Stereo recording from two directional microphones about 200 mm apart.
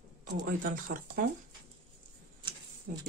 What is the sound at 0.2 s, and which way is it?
Speech, 40° right (ahead or behind).